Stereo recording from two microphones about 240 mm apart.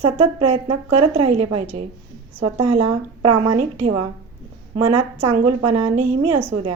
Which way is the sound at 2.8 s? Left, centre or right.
Right.